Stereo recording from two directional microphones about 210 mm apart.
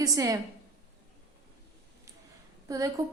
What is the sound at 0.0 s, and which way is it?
Speech, 15° right (ahead or behind).